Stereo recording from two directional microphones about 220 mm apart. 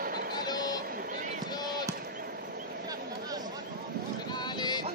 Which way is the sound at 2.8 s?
15° right (ahead or behind).